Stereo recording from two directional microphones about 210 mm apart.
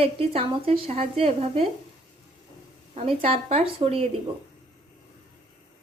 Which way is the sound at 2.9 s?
30° right (ahead or behind).